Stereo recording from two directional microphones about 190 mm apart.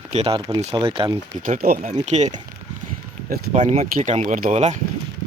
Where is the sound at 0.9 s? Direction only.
20° right (ahead or behind).